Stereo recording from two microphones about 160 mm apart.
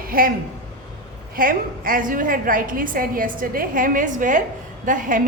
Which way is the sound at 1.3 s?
65° right (ahead or behind).